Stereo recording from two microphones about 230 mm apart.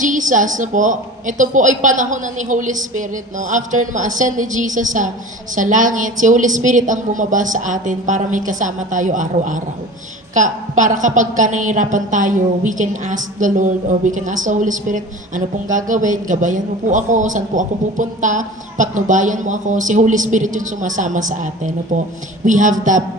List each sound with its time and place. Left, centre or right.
0.0 s a woman's voice: right